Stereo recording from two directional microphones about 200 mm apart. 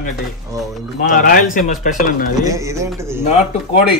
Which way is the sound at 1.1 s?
45° left (ahead or behind).